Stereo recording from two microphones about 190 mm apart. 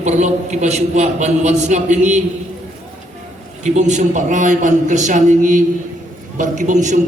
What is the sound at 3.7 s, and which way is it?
A man's voice, 40° right (ahead or behind).